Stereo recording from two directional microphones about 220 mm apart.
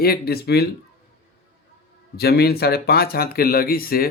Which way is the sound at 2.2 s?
45° left (ahead or behind).